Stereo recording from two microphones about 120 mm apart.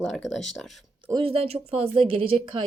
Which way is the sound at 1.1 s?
50° right (ahead or behind).